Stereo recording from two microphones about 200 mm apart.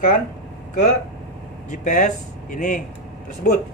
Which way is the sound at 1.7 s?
40° left (ahead or behind).